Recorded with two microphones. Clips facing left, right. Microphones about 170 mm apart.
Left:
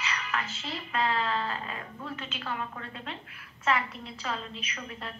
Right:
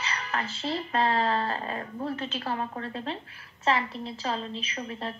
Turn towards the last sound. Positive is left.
turn(degrees=-30)  # may be behind; listen again after turning